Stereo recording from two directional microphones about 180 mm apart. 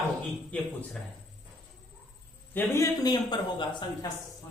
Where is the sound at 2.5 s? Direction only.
10° left (ahead or behind).